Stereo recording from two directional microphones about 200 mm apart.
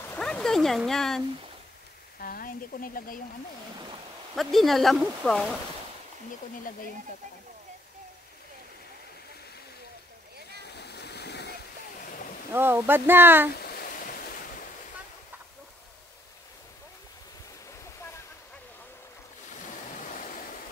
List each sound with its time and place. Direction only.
0.0 s a sound: 5° left (ahead or behind)
2.1 s speech: 45° left (ahead or behind)
4.4 s speech: centre (ahead or behind)
10.6 s waterfall: 55° left (ahead or behind)
12.1 s a sound: 40° left (ahead or behind)
12.5 s speech: 10° right (ahead or behind)
13.6 s waves: 50° left (ahead or behind)